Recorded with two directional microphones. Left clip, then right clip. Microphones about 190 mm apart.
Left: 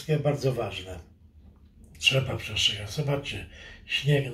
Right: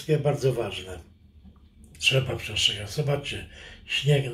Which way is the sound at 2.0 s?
45° right (ahead or behind).